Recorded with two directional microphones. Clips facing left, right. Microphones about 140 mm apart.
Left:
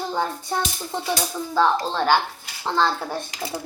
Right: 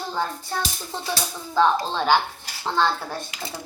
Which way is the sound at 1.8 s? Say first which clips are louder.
Left 1 dB; 10° right (ahead or behind).